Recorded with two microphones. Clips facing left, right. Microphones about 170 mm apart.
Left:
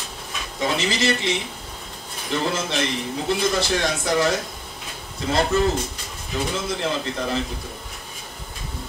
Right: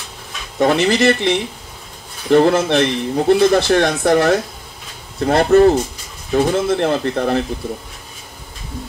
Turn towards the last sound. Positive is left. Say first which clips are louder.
# right 8 dB
turn(degrees=-60)  # may be behind; listen again after turning